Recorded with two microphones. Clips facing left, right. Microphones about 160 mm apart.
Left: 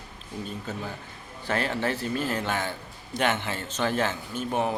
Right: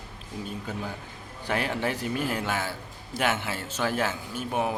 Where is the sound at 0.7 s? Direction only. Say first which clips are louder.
Even; 10° right (ahead or behind).